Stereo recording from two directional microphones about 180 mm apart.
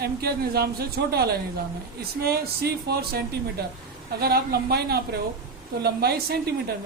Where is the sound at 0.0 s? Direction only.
60° right (ahead or behind).